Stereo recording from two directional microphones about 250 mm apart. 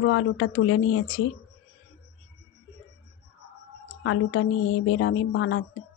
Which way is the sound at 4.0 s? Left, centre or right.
Left.